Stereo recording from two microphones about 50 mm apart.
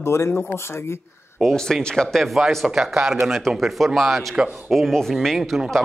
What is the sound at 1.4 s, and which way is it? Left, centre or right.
Speech, centre.